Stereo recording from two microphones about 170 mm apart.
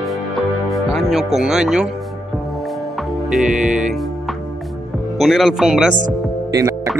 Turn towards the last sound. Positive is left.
turn(degrees=-15)  # may be behind; listen again after turning